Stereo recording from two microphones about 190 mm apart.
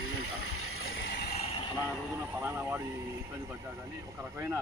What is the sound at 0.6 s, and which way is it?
Vehicle, 90° left.